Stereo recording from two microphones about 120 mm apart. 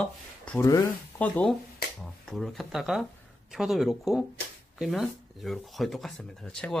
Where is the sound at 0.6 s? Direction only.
25° left (ahead or behind).